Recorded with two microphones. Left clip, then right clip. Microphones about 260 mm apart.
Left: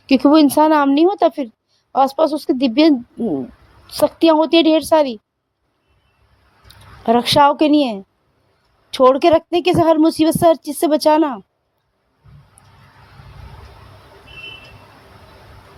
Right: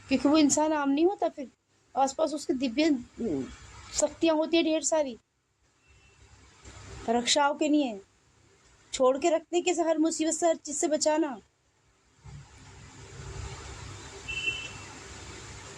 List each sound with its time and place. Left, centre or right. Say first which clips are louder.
0.1 s a woman's voice: left 12 dB; left
3.9 s a woman's voice: left 13 dB; left
7.0 s a woman's voice: left 13 dB; left